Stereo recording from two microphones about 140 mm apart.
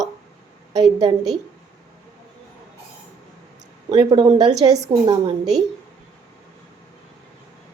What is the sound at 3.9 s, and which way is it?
A woman's voice, 35° right (ahead or behind).